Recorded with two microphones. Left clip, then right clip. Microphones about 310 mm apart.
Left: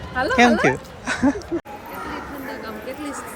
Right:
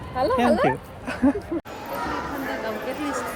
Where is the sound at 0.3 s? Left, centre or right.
Centre.